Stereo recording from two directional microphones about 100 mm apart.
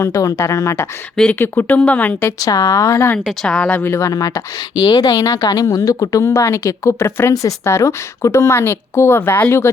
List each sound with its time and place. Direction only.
0.0 s speech: 30° left (ahead or behind)
1.1 s speech: 10° left (ahead or behind)
1.4 s speech: 20° left (ahead or behind)
2.4 s a woman's voice: 35° left (ahead or behind)
3.4 s speech: 10° left (ahead or behind)
3.9 s speech: 30° left (ahead or behind)
4.9 s speech: 45° left (ahead or behind)
5.1 s a woman's voice: 30° left (ahead or behind)